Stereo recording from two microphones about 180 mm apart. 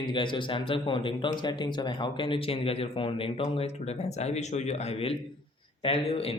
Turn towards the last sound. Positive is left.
turn(degrees=30)  # may be behind; listen again after turning